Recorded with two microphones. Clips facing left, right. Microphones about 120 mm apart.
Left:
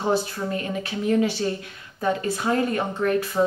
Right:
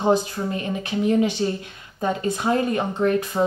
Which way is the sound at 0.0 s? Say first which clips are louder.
Right 3 dB; 20° right (ahead or behind).